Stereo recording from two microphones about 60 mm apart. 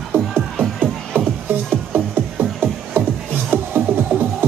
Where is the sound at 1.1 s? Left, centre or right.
Right.